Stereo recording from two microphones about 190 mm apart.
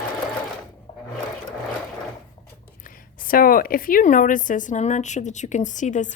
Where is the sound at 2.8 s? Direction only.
50° left (ahead or behind).